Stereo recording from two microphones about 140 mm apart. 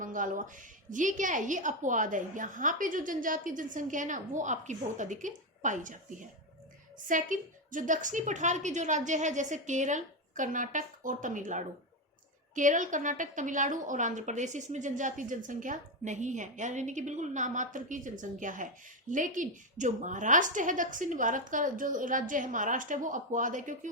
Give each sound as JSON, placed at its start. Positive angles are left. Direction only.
{"t": 0.0, "sound": "a woman's voice", "side_deg": -70}
{"t": 7.1, "sound": "a woman's voice", "side_deg": -65}